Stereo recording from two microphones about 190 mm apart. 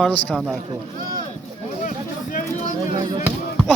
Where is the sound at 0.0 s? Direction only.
5° left (ahead or behind).